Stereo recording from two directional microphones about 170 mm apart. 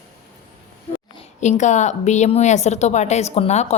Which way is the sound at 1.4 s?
45° left (ahead or behind).